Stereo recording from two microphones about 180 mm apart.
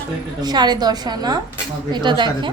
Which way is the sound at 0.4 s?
25° right (ahead or behind).